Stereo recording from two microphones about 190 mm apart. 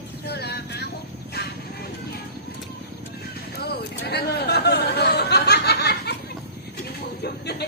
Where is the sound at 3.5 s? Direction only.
60° left (ahead or behind).